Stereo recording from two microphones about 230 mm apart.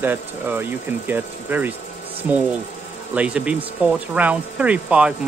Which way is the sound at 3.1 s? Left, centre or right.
Centre.